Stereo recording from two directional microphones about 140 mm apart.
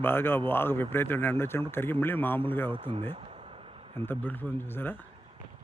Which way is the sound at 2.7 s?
35° right (ahead or behind).